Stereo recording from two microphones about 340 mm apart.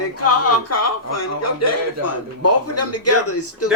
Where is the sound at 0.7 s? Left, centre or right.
Left.